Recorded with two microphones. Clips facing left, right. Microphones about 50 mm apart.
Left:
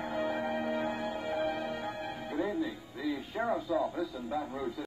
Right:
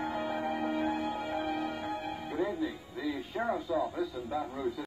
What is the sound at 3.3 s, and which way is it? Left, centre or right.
Radio, centre.